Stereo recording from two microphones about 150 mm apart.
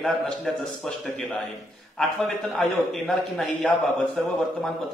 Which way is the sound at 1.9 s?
5° left (ahead or behind).